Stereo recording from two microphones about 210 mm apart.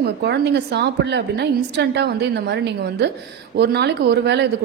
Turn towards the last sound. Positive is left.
turn(degrees=-55)  # may be behind; listen again after turning